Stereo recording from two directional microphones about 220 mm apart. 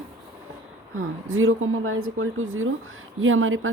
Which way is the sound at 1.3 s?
65° right (ahead or behind).